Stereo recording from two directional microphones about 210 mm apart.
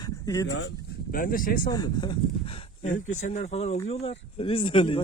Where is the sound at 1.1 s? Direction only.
40° left (ahead or behind).